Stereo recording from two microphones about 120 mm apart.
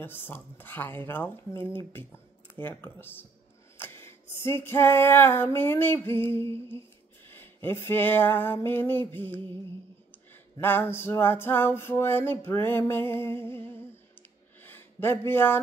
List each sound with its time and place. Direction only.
0.0 s speech: 15° left (ahead or behind)
3.7 s female singing: 20° left (ahead or behind)
7.2 s a sound: 20° left (ahead or behind)
9.1 s speech: 15° left (ahead or behind)
10.6 s music: 15° left (ahead or behind)
14.6 s a sound: 15° left (ahead or behind)